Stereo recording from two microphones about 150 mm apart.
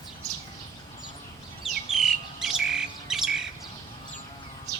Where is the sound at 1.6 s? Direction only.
Centre (ahead or behind).